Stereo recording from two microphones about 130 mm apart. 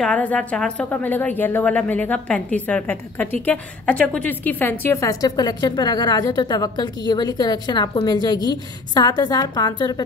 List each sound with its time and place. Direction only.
0.0 s a woman's voice: 10° left (ahead or behind); by 10.0 s 30° left (ahead or behind)